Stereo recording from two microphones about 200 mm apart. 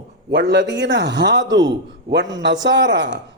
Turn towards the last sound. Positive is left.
turn(degrees=-65)  # may be behind; listen again after turning